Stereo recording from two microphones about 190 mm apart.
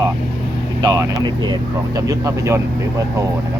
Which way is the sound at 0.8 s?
20° right (ahead or behind).